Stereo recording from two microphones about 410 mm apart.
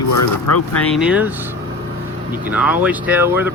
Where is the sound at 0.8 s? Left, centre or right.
Centre.